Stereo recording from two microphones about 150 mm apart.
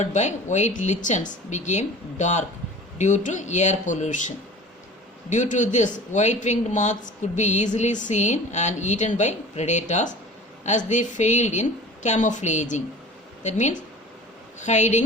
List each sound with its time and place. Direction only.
0.0 s speech: 50° left (ahead or behind)
5.3 s speech: 55° left (ahead or behind)